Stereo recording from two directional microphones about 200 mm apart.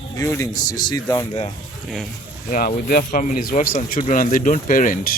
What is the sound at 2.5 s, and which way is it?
Speech, 45° left (ahead or behind).